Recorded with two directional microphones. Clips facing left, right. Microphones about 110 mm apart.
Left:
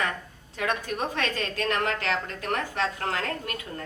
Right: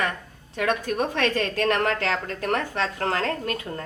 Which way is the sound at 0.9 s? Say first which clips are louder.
Right 5 dB; 55° right (ahead or behind).